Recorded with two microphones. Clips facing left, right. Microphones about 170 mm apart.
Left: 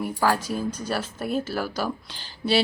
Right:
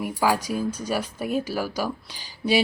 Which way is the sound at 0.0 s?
10° right (ahead or behind).